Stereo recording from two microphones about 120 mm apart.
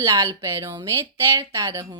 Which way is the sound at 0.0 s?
25° right (ahead or behind).